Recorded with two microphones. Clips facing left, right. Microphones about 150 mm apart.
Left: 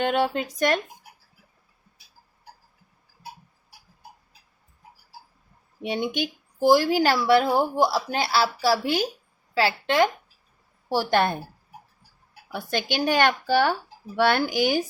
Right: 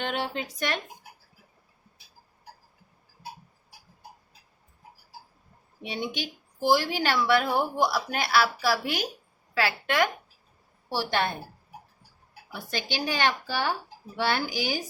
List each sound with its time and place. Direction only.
0.0 s speech: 50° left (ahead or behind)
5.8 s a woman's voice: 50° left (ahead or behind); by 10.1 s 30° left (ahead or behind)
10.8 s speech: 45° left (ahead or behind)
12.5 s speech: 55° left (ahead or behind)